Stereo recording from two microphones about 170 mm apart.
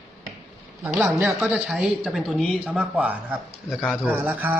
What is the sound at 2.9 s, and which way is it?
Speech, 10° right (ahead or behind).